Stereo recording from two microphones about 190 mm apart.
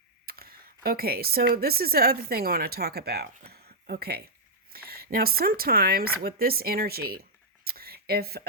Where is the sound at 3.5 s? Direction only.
55° right (ahead or behind).